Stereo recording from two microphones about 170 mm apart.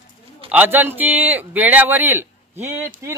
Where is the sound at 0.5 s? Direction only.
10° right (ahead or behind).